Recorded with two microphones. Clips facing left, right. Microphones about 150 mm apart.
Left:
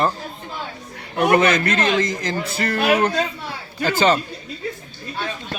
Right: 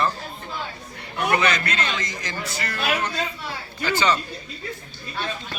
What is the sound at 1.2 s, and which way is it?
A man's voice, 45° left (ahead or behind).